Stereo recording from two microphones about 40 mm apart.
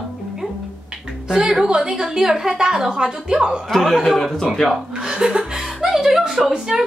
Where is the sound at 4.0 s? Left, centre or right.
Centre.